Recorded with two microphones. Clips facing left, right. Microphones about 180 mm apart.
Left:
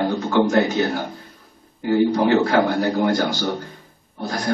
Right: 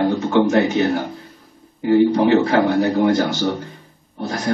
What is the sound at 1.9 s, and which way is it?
Speech, 25° right (ahead or behind).